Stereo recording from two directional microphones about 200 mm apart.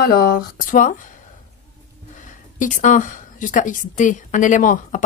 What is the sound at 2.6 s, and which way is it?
A woman's voice, 40° left (ahead or behind).